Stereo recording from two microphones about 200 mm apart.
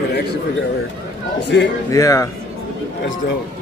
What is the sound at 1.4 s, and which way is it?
Speech, 60° left (ahead or behind).